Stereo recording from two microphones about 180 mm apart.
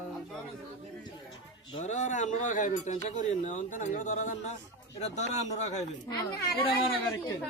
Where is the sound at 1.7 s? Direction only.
30° left (ahead or behind).